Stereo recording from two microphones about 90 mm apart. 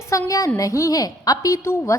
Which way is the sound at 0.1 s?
35° left (ahead or behind).